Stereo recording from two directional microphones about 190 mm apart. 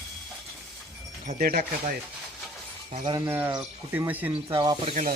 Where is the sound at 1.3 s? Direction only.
50° right (ahead or behind).